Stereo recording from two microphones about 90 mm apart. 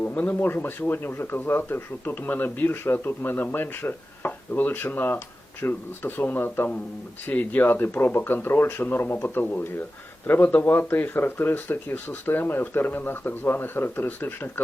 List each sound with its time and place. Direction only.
0.0 s speech: 20° left (ahead or behind)